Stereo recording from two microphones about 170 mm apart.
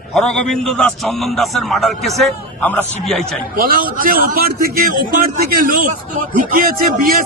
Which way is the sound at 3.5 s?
60° right (ahead or behind).